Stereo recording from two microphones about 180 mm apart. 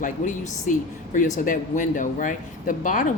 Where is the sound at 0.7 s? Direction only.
45° left (ahead or behind).